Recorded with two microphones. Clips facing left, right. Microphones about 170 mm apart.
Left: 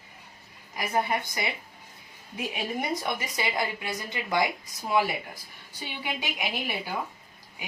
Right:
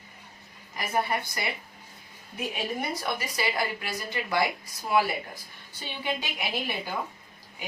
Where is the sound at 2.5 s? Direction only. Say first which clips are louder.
Left 2 dB; 15° left (ahead or behind).